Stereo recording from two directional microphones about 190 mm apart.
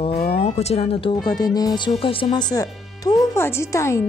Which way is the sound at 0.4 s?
35° left (ahead or behind).